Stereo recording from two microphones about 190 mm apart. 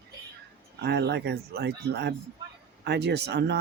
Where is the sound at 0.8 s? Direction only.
60° right (ahead or behind).